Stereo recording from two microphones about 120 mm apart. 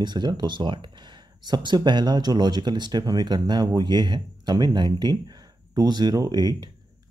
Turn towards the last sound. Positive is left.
turn(degrees=-35)  # may be behind; listen again after turning